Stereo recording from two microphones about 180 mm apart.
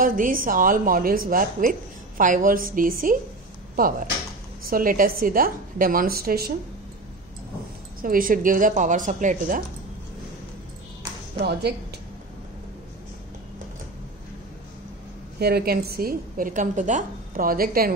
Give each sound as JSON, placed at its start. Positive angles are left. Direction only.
{"t": 0.0, "sound": "a woman's voice", "side_deg": -50}
{"t": 4.6, "sound": "a woman's voice", "side_deg": -50}
{"t": 8.0, "sound": "a woman's voice", "side_deg": -50}
{"t": 11.3, "sound": "a woman's voice", "side_deg": -65}
{"t": 15.3, "sound": "a woman's voice", "side_deg": -60}